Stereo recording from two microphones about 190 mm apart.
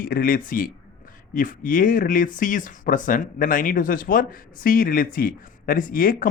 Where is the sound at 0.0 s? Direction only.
50° left (ahead or behind).